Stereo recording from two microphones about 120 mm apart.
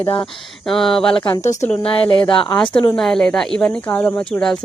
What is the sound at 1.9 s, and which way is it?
Speech, 40° left (ahead or behind).